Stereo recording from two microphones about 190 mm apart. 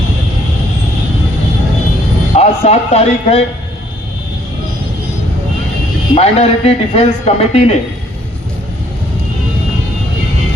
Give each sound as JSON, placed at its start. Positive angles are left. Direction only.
{"t": 2.4, "sound": "a man's voice", "side_deg": 35}
{"t": 6.1, "sound": "a man's voice", "side_deg": 35}